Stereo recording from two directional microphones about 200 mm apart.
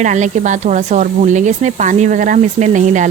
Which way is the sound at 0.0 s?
35° right (ahead or behind).